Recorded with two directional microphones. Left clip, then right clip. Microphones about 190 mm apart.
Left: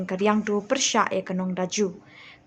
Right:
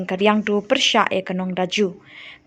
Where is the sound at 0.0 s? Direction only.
20° right (ahead or behind).